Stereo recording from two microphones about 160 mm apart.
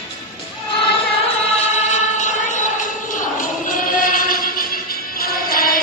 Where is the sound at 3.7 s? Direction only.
60° left (ahead or behind).